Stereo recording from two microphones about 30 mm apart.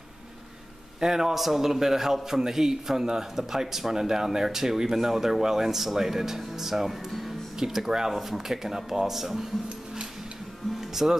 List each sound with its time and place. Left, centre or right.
1.0 s a man's voice: centre
1.3 s speech: centre
7.1 s music: centre
7.5 s speech: centre
8.1 s speech: centre
10.8 s music: centre